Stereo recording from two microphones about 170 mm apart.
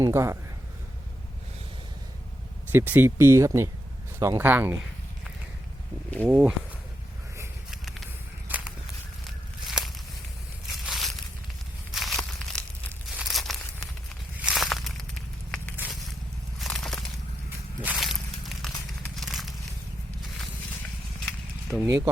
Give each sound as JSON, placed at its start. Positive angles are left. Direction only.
{"t": 0.0, "sound": "speech", "side_deg": -15}
{"t": 2.7, "sound": "speech", "side_deg": -10}
{"t": 6.2, "sound": "speech", "side_deg": -10}
{"t": 7.7, "sound": "a sound", "side_deg": 0}
{"t": 9.6, "sound": "walk", "side_deg": 0}
{"t": 10.7, "sound": "crushing", "side_deg": 0}
{"t": 11.9, "sound": "crumpling", "side_deg": 0}
{"t": 14.3, "sound": "walk", "side_deg": -5}
{"t": 16.6, "sound": "a sound", "side_deg": 0}
{"t": 17.8, "sound": "walk", "side_deg": 0}
{"t": 19.0, "sound": "crackle", "side_deg": 0}
{"t": 21.7, "sound": "speech", "side_deg": -15}